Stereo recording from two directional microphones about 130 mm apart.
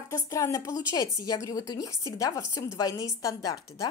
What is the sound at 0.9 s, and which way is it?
A woman's voice, 35° left (ahead or behind).